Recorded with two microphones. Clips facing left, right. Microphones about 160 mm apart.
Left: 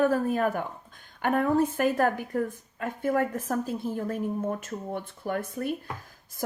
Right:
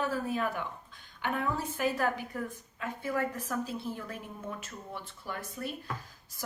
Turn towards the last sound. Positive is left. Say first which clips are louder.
# left 8 dB
turn(degrees=55)  # may be behind; listen again after turning